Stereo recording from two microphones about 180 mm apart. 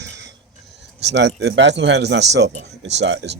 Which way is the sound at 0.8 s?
75° right (ahead or behind).